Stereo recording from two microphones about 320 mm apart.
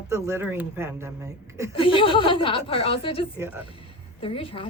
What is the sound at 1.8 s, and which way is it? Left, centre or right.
A woman's voice, centre.